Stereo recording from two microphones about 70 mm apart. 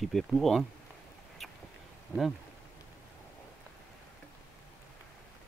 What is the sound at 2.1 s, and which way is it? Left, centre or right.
Speech, left.